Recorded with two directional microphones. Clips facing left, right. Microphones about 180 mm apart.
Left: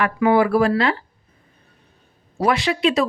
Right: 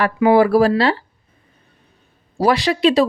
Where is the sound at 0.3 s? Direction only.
35° right (ahead or behind).